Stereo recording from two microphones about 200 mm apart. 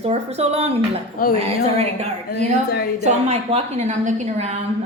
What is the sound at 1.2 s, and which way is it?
A woman's voice, 45° left (ahead or behind).